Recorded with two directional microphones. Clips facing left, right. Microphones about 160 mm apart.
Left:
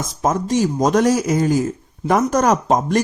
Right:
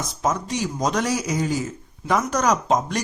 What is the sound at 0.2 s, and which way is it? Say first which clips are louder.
Speech: left 7 dB; 45° left (ahead or behind).